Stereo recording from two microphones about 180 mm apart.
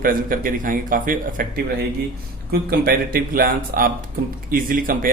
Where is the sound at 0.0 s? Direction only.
50° right (ahead or behind).